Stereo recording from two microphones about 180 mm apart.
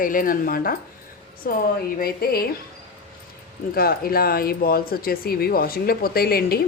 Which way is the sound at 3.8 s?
55° left (ahead or behind).